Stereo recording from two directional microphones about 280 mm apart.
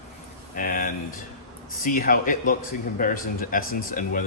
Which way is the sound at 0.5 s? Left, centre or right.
Left.